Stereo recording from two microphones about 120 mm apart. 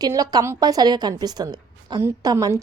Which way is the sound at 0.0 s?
30° right (ahead or behind).